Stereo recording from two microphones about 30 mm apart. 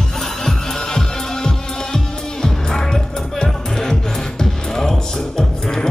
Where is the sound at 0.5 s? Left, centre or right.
Left.